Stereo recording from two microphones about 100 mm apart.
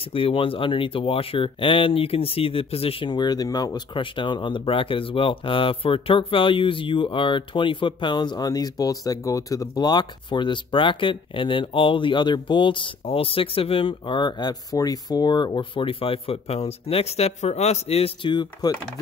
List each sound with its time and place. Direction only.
0.0 s speech: 65° left (ahead or behind)
3.1 s speech: 45° left (ahead or behind); by 18.3 s 85° left
18.3 s speech: 50° left (ahead or behind)